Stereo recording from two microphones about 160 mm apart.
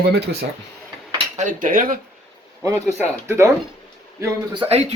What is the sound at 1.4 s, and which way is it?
Speech, 55° right (ahead or behind).